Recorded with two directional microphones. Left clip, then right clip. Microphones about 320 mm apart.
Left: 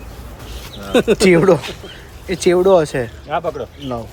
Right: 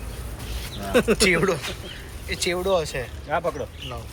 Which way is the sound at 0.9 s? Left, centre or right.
Left.